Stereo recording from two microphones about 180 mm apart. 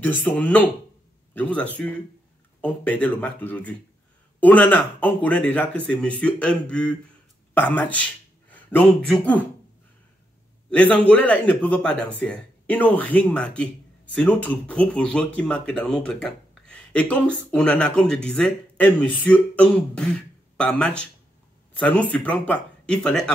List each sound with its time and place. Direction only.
0.0 s speech: 10° left (ahead or behind)
10.7 s speech: 10° left (ahead or behind)